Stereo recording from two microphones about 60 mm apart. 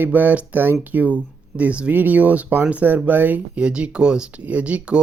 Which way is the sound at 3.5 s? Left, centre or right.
Centre.